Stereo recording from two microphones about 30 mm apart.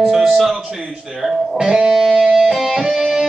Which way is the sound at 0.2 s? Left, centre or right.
Centre.